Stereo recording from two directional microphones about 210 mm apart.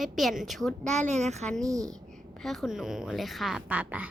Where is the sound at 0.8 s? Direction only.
35° right (ahead or behind).